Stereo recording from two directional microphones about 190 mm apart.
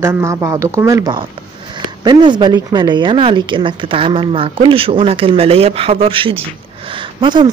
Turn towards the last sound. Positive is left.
turn(degrees=-25)  # may be behind; listen again after turning